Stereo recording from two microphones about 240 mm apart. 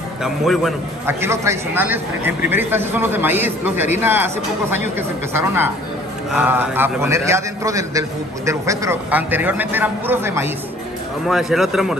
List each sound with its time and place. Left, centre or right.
0.2 s a man's voice: centre